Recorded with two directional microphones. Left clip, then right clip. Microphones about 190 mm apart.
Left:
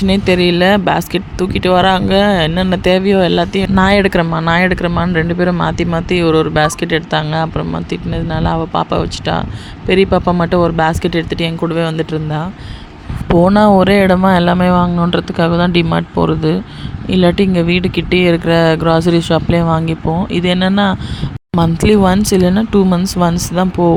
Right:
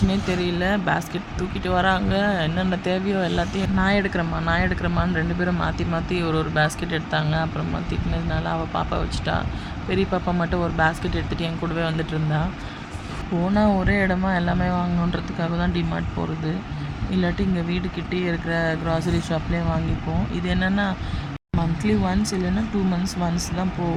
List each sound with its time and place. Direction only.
0.1 s speech: 45° left (ahead or behind)
13.4 s speech: 50° left (ahead or behind)
21.6 s speech: 55° left (ahead or behind)